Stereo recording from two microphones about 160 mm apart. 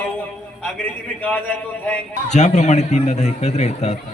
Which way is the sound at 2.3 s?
45° left (ahead or behind).